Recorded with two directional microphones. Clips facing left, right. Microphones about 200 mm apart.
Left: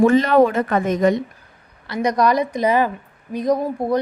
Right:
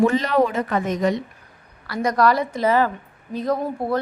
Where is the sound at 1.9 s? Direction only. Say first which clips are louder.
Left 1 dB; 20° left (ahead or behind).